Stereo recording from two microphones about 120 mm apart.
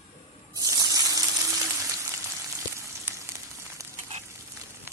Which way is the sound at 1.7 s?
25° right (ahead or behind).